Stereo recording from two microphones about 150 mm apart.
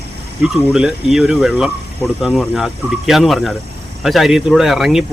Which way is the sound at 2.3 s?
10° left (ahead or behind).